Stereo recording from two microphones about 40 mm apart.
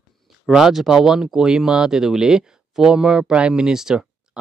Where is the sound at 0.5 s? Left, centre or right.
Centre.